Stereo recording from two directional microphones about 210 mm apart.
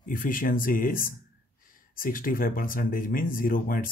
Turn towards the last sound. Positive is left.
turn(degrees=40)  # may be behind; listen again after turning